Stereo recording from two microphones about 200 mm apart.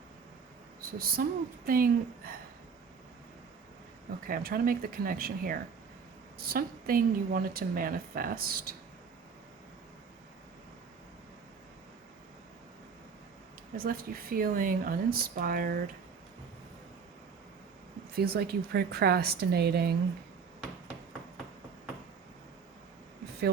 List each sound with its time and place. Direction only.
0.8 s speech: 50° right (ahead or behind)
4.3 s speech: 45° right (ahead or behind)
13.7 s speech: 45° right (ahead or behind)
18.1 s speech: 50° right (ahead or behind)